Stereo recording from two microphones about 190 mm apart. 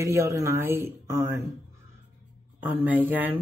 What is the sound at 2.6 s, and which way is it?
Speech, 10° right (ahead or behind).